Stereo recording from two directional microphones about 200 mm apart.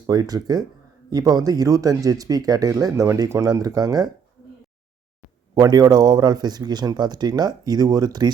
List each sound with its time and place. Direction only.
0.1 s speech: 20° right (ahead or behind)
5.5 s speech: 20° right (ahead or behind)